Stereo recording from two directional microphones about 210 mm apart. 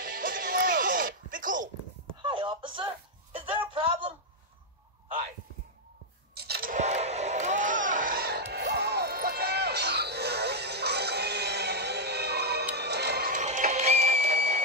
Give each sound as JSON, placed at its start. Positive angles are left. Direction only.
{"t": 0.0, "sound": "music", "side_deg": -40}
{"t": 2.2, "sound": "a sound", "side_deg": -25}
{"t": 6.3, "sound": "vehicle", "side_deg": -50}